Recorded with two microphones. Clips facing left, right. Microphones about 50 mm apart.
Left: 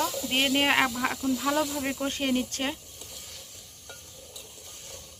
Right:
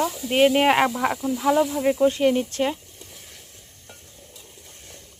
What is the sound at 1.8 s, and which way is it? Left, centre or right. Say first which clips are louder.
Speech: right 10 dB; centre.